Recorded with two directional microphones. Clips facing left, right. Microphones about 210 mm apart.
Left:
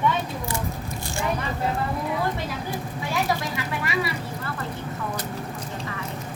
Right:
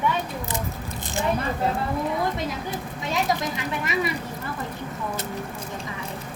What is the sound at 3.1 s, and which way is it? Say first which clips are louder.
Speech: right 1 dB; 20° right (ahead or behind).